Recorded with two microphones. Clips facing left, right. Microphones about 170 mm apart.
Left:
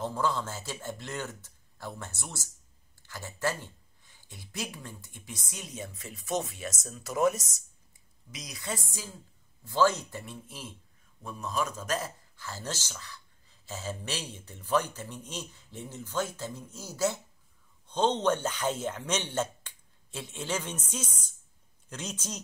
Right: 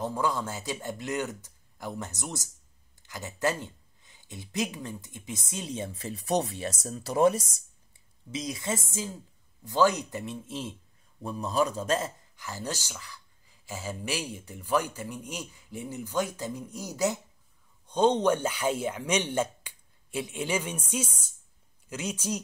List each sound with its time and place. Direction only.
0.0 s speech: 15° right (ahead or behind)